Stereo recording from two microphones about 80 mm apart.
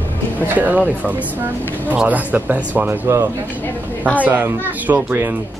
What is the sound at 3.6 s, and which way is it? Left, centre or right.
Speech, left.